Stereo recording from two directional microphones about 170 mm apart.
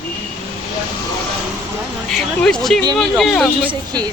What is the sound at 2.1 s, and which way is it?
Speech, centre (ahead or behind).